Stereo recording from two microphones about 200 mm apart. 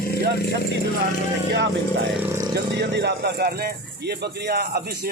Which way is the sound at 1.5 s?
60° right (ahead or behind).